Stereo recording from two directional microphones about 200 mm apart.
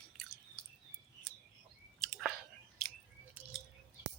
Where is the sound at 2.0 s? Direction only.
Centre (ahead or behind).